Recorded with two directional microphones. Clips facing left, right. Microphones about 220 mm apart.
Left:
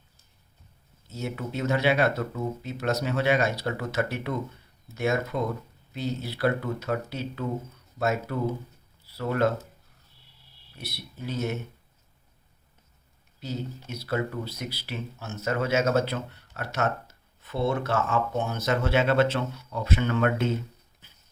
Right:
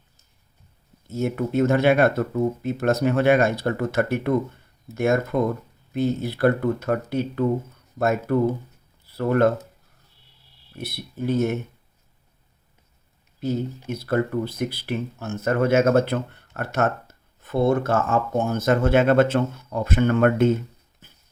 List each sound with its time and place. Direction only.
1.0 s speech: 50° right (ahead or behind)
10.8 s speech: 50° right (ahead or behind)
13.9 s speech: 50° right (ahead or behind)